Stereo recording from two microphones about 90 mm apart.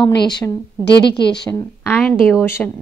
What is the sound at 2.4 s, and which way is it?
Speech, 25° left (ahead or behind).